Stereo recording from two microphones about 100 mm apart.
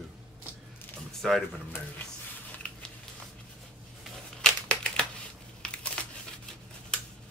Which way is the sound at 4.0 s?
10° left (ahead or behind).